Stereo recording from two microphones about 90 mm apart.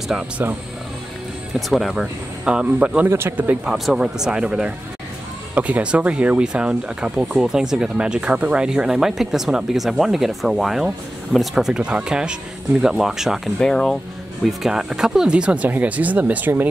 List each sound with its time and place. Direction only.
0.1 s speech: 15° right (ahead or behind)
1.5 s speech: centre (ahead or behind)
3.1 s speech: 30° right (ahead or behind)
3.3 s speech: 20° right (ahead or behind)
3.7 s speech: 5° right (ahead or behind); by 16.6 s 20° right (ahead or behind)